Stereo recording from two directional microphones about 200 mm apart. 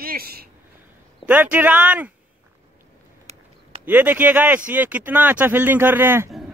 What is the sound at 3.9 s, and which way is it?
Speech, 10° right (ahead or behind).